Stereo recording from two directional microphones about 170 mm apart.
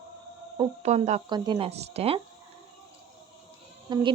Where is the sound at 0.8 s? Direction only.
40° right (ahead or behind).